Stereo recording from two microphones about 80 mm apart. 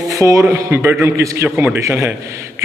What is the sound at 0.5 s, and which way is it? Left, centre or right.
A man's voice, right.